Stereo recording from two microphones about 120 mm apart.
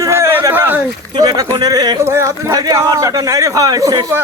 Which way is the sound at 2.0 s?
20° right (ahead or behind).